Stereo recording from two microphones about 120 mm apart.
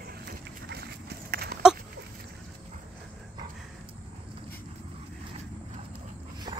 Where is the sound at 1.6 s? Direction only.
5° right (ahead or behind).